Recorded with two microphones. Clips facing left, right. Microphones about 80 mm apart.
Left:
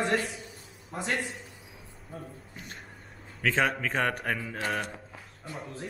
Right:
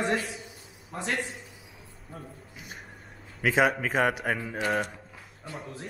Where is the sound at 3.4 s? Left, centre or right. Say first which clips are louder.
Right 3 dB; centre.